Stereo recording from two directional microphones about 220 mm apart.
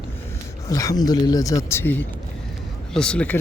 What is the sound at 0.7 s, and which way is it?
Speech, 15° left (ahead or behind).